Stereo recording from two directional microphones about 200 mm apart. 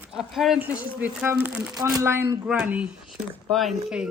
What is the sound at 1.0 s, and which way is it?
Speech, 10° right (ahead or behind).